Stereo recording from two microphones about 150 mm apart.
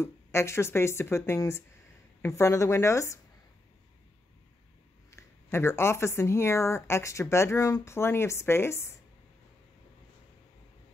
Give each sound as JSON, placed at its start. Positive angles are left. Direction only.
{"t": 0.0, "sound": "speech", "side_deg": 20}
{"t": 5.1, "sound": "speech", "side_deg": 15}